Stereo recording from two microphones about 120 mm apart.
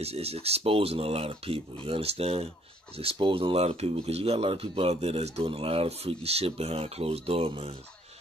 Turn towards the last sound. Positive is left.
turn(degrees=-55)  # may be behind; listen again after turning